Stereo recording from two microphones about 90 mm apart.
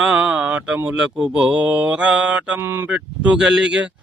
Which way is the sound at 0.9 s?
5° right (ahead or behind).